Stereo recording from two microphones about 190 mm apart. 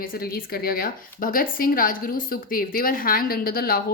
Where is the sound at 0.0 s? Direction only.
50° left (ahead or behind).